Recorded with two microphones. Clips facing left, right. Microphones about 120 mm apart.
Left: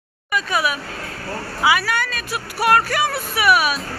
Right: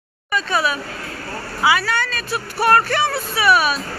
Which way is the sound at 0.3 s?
15° left (ahead or behind).